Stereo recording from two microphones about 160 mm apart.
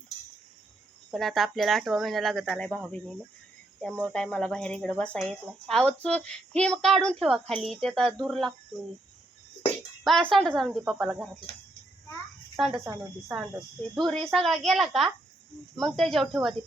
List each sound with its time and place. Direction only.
1.1 s speech: centre (ahead or behind)
3.9 s speech: 5° left (ahead or behind)
10.0 s speech: centre (ahead or behind)
12.6 s speech: 5° right (ahead or behind)